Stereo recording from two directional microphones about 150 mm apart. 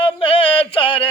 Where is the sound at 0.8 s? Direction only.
35° left (ahead or behind).